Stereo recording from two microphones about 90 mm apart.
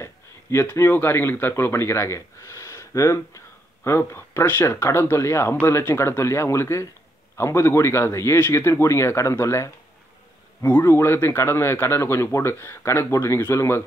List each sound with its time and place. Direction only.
0.0 s a man's voice: 30° left (ahead or behind)